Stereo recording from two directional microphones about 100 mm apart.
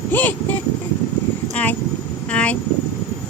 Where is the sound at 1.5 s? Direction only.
15° left (ahead or behind).